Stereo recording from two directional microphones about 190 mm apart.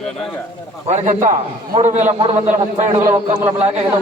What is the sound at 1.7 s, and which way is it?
A man's voice, 35° right (ahead or behind).